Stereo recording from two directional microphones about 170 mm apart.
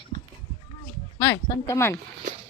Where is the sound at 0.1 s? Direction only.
55° right (ahead or behind).